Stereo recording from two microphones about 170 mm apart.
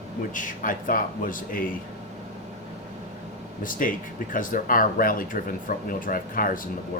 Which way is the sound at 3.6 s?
55° left (ahead or behind).